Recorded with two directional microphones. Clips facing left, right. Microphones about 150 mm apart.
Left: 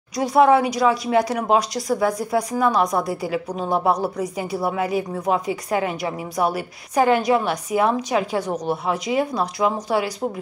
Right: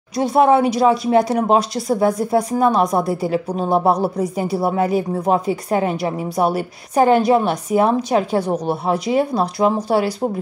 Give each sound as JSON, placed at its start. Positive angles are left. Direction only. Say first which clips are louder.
{"t": 0.2, "sound": "a woman's voice", "louder": "right 2 dB", "side_deg": -25}